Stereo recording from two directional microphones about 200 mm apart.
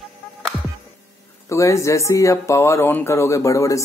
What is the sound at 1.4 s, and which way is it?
Speech, 15° left (ahead or behind).